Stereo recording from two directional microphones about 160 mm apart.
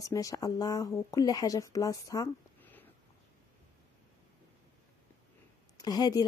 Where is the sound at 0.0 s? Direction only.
20° left (ahead or behind).